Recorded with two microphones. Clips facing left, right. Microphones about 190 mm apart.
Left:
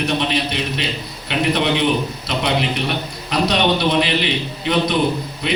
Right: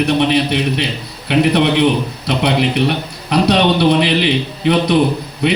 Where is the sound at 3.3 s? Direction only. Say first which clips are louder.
Right 5 dB; 65° right (ahead or behind).